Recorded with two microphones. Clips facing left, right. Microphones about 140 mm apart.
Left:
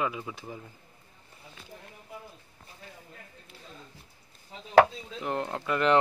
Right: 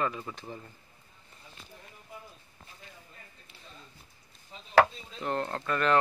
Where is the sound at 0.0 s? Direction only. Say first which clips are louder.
Left 1 dB; 5° left (ahead or behind).